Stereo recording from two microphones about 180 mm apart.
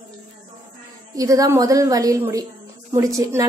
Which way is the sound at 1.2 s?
20° right (ahead or behind).